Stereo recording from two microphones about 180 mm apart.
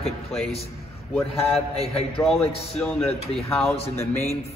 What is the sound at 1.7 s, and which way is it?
Speech, 35° left (ahead or behind).